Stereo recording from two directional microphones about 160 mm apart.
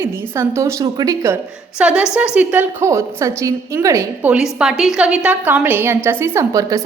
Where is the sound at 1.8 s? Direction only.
5° right (ahead or behind).